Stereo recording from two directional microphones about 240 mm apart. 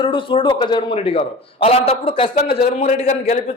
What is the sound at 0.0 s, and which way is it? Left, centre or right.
A man's voice, left.